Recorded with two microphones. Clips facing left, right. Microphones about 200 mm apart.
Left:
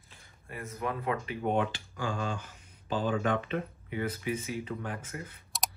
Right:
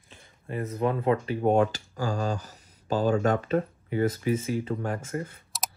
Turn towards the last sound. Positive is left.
turn(degrees=-45)  # may be behind; listen again after turning